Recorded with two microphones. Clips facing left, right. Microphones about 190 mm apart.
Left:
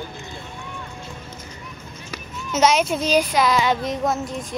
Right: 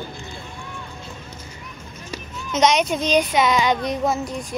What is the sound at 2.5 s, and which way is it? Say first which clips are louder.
Speech: even; 5° left (ahead or behind).